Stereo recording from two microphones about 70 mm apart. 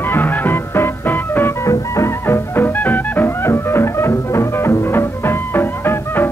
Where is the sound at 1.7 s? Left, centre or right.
Left.